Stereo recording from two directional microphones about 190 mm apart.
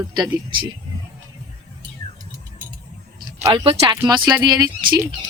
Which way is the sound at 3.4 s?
25° right (ahead or behind).